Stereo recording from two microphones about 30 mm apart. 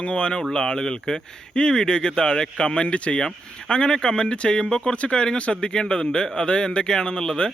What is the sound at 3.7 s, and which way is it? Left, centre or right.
Speech, left.